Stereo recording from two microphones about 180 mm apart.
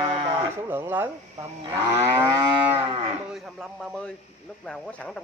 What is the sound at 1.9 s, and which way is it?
Moo, 15° right (ahead or behind).